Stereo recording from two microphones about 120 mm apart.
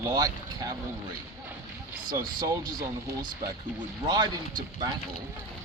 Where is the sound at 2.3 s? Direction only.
30° right (ahead or behind).